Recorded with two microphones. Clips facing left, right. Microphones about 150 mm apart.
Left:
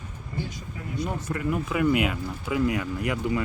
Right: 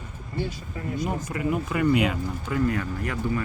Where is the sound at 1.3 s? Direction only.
5° right (ahead or behind).